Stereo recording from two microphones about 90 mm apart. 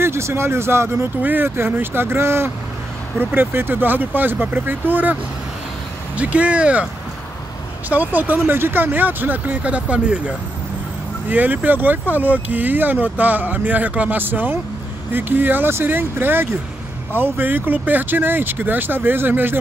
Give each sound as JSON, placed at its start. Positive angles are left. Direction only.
{"t": 0.0, "sound": "speech", "side_deg": -30}
{"t": 7.9, "sound": "speech", "side_deg": -20}